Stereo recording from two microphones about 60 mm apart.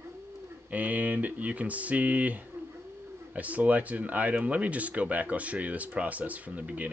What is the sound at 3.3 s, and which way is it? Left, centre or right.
Speech, right.